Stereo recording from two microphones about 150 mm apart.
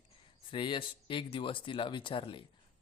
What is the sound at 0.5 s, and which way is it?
Speech, 35° left (ahead or behind).